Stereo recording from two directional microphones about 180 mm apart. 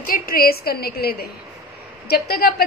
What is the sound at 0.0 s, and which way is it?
A woman's voice, 55° left (ahead or behind).